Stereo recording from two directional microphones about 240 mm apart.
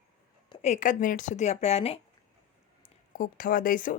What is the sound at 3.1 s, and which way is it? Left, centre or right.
Speech, left.